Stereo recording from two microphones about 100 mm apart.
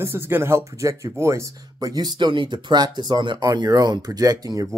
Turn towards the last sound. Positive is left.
turn(degrees=-40)  # may be behind; listen again after turning